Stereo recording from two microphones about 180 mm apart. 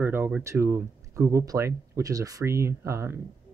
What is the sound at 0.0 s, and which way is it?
Speech, 10° right (ahead or behind).